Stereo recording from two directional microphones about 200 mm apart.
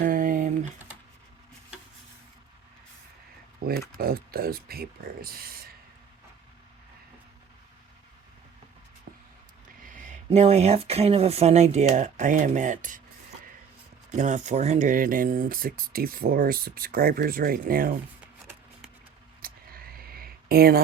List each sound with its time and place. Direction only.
0.0 s typing: 45° right (ahead or behind)
3.7 s speech: 50° right (ahead or behind)
9.1 s a sound: 45° right (ahead or behind)
9.8 s speech: 40° right (ahead or behind)
14.1 s speech: 35° right (ahead or behind)
19.4 s a sound: 45° right (ahead or behind)